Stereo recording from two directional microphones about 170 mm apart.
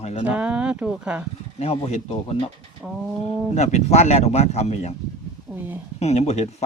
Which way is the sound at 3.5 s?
40° left (ahead or behind).